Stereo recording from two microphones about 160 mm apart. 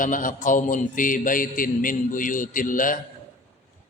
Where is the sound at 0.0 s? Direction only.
55° left (ahead or behind).